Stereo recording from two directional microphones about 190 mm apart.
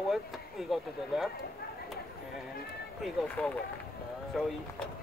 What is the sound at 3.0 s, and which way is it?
Speech, 5° left (ahead or behind).